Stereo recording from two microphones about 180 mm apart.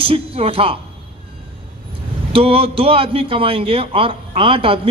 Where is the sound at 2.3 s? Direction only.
30° right (ahead or behind).